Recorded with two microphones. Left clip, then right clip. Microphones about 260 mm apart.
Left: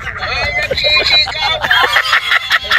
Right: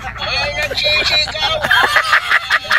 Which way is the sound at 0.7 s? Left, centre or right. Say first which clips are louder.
Left 4 dB; centre.